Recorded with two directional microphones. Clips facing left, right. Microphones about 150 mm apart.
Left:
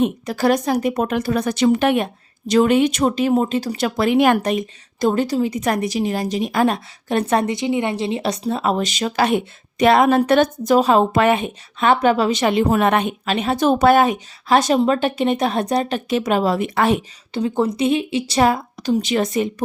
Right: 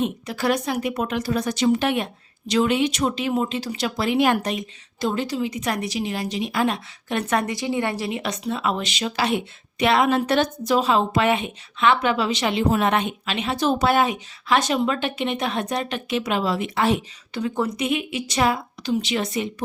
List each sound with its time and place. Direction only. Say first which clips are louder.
0.0 s speech: left 6 dB; 45° left (ahead or behind)
17.3 s speech: left 5 dB; 30° left (ahead or behind)
18.3 s speech: left 4 dB; 45° left (ahead or behind)